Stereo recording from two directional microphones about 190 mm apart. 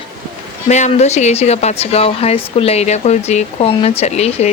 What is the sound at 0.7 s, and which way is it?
Speech, 35° left (ahead or behind).